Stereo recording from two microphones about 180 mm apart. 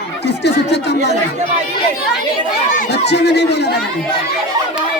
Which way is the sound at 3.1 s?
70° left (ahead or behind).